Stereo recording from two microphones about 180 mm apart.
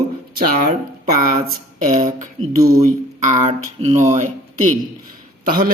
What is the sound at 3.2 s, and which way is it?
Speech, 45° right (ahead or behind).